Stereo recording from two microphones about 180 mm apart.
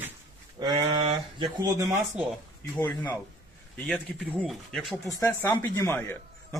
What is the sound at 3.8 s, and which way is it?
Speech, centre (ahead or behind).